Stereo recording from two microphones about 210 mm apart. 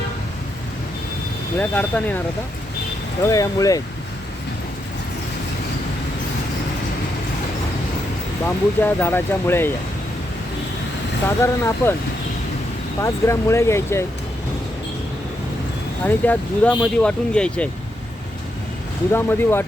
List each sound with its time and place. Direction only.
1.5 s speech: 10° left (ahead or behind)
3.2 s speech: 15° left (ahead or behind)
8.4 s speech: 10° left (ahead or behind)
11.6 s speech: 10° left (ahead or behind)
13.0 s speech: 15° left (ahead or behind)
16.0 s speech: 10° left (ahead or behind)
19.1 s speech: 10° left (ahead or behind)